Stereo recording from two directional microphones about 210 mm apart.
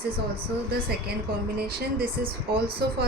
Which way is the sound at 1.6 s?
45° right (ahead or behind).